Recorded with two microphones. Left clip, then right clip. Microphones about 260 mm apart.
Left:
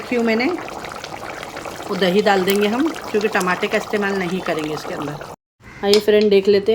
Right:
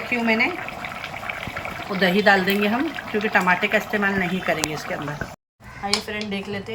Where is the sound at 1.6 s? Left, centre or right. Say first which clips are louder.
Left 2 dB; centre.